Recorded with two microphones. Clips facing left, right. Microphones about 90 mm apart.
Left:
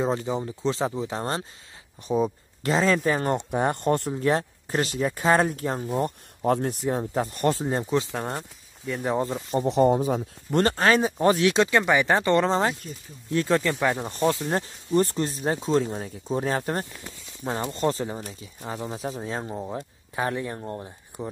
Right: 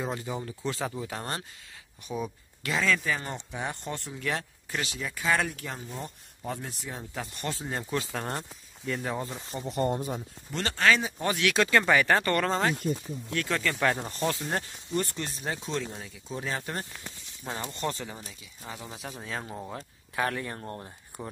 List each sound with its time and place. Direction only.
0.0 s speech: 25° left (ahead or behind)
3.0 s speech: 45° left (ahead or behind)
4.1 s speech: 35° left (ahead or behind)
6.0 s speech: 65° left (ahead or behind); by 7.6 s 40° left (ahead or behind)
7.6 s speech: 20° left (ahead or behind)
8.3 s speech: 5° left (ahead or behind)
9.0 s speech: 25° left (ahead or behind)
9.6 s a man's voice: 85° left
10.5 s speech: 45° left (ahead or behind); by 14.7 s 25° left (ahead or behind)
14.9 s speech: 35° left (ahead or behind)
17.4 s speech: 25° left (ahead or behind)
19.1 s speech: 25° left (ahead or behind)